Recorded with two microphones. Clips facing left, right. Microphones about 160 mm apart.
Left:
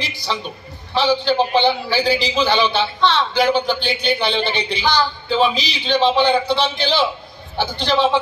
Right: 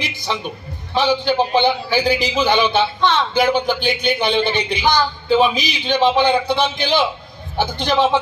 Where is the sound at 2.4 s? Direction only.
15° right (ahead or behind).